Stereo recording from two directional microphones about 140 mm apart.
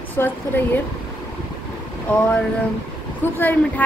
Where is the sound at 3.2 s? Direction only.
15° left (ahead or behind).